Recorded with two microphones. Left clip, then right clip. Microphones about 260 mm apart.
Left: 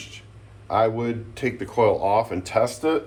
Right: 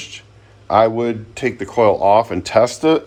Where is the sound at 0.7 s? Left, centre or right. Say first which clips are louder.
Right 7 dB; right.